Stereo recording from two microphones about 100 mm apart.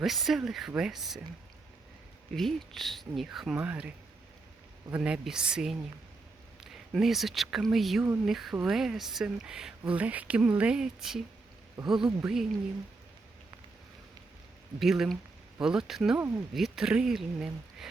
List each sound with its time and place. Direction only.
0.0 s speech: centre (ahead or behind)
2.3 s speech: 5° left (ahead or behind)
3.6 s speech: 15° right (ahead or behind)
6.9 s speech: centre (ahead or behind)
14.8 s speech: 5° right (ahead or behind)